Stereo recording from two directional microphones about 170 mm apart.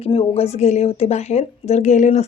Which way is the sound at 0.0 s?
35° left (ahead or behind).